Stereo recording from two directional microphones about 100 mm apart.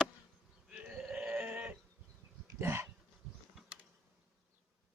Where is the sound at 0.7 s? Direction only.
10° right (ahead or behind).